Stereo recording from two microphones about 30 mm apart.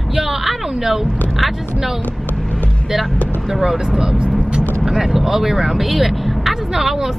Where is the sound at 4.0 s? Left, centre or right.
Right.